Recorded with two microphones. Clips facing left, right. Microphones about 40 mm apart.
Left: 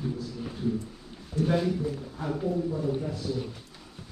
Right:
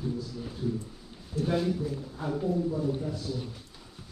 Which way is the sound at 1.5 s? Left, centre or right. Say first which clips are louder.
Left 1 dB; centre.